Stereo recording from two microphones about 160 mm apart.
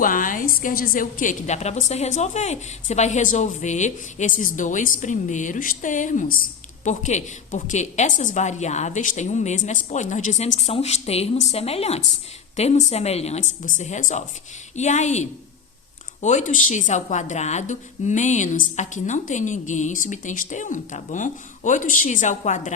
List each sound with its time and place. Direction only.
0.0 s a woman's voice: 55° left (ahead or behind); by 13.4 s 40° left (ahead or behind)
13.6 s a woman's voice: 50° left (ahead or behind)